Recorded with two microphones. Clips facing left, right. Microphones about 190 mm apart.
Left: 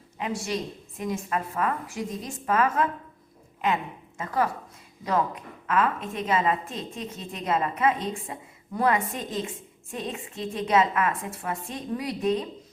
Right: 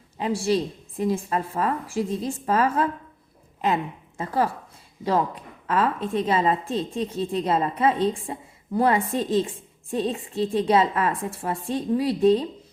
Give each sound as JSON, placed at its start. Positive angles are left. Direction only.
{"t": 0.2, "sound": "a woman's voice", "side_deg": -30}